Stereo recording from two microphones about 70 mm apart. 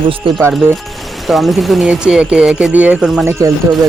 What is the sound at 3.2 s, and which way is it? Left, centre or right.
Music, right.